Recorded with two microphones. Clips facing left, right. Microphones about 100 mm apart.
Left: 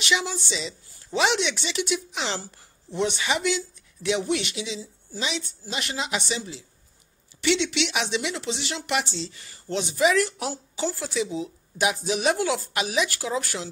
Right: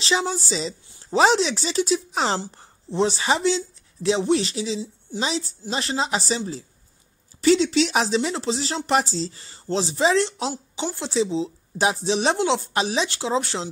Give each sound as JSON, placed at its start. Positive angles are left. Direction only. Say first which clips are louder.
{"t": 0.0, "sound": "a woman's voice", "louder": "right 3 dB", "side_deg": -35}